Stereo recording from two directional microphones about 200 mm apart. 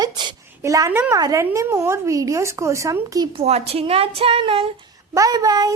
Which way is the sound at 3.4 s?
30° right (ahead or behind).